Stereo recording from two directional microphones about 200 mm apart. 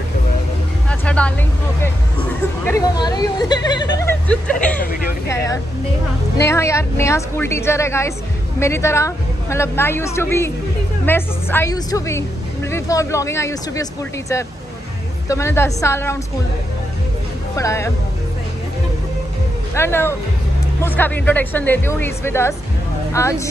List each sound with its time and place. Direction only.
0.8 s vehicle: 5° left (ahead or behind)
2.6 s speech: 15° left (ahead or behind)
4.0 s speech: 5° left (ahead or behind)
6.4 s a woman's voice: 15° left (ahead or behind)
15.2 s a woman's voice: 15° left (ahead or behind)
17.6 s a woman's voice: 15° left (ahead or behind)
19.7 s a woman's voice: 10° left (ahead or behind)